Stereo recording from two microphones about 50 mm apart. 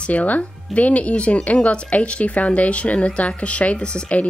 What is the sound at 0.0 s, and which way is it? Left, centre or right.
Speech, left.